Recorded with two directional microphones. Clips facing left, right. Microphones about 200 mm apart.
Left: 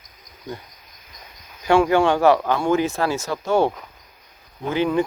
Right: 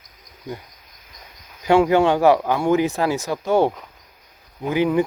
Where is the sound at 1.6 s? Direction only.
20° right (ahead or behind).